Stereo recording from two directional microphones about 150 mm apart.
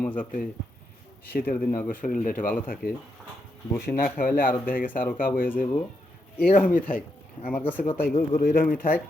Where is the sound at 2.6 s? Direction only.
80° left; by 5.3 s 65° left (ahead or behind).